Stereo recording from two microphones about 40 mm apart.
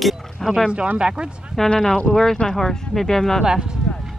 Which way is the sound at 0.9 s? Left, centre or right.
Right.